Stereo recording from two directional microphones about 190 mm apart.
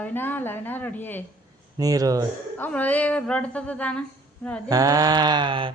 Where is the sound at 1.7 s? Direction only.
20° right (ahead or behind).